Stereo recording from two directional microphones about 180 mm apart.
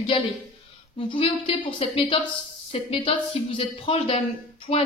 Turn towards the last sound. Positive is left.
turn(degrees=35)  # may be behind; listen again after turning